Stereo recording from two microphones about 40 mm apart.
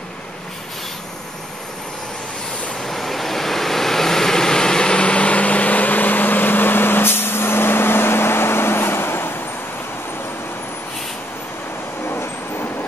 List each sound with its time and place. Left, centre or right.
2.8 s vehicle: centre; by 9.4 s left